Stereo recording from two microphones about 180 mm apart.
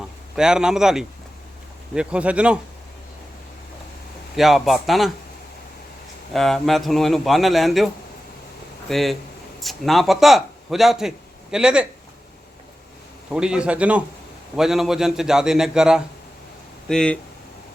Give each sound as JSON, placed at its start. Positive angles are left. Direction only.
{"t": 0.3, "sound": "a man's voice", "side_deg": -5}
{"t": 4.4, "sound": "a man's voice", "side_deg": 0}
{"t": 6.3, "sound": "a man's voice", "side_deg": 0}
{"t": 8.9, "sound": "a man's voice", "side_deg": 0}
{"t": 13.3, "sound": "a man's voice", "side_deg": -5}